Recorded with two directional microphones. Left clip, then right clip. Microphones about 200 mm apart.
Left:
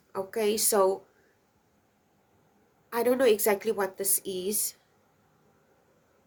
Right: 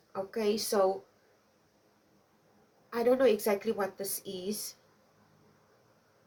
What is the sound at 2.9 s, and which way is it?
A woman's voice, 55° left (ahead or behind).